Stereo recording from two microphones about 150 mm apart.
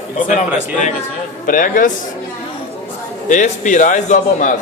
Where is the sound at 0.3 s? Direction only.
55° left (ahead or behind).